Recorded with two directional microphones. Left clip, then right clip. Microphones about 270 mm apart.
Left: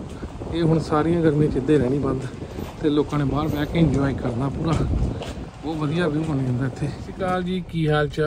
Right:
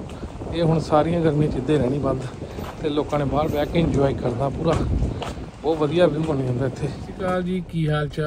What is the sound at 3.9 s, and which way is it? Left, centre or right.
Speech, centre.